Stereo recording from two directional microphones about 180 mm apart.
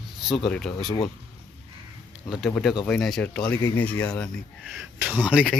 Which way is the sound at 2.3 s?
5° left (ahead or behind).